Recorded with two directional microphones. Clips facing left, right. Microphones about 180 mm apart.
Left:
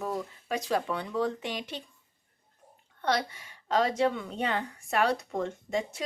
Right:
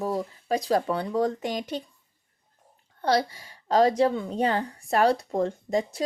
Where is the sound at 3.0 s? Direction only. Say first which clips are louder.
Right 5 dB; 35° right (ahead or behind).